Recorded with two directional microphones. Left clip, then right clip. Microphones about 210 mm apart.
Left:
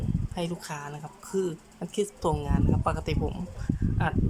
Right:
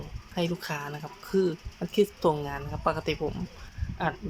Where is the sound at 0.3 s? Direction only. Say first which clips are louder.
Right 5 dB; centre (ahead or behind).